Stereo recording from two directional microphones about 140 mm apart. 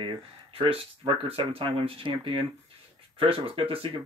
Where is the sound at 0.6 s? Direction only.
40° right (ahead or behind).